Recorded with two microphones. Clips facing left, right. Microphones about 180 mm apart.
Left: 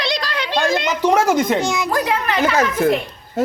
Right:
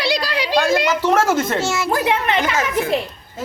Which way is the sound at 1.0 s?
15° left (ahead or behind).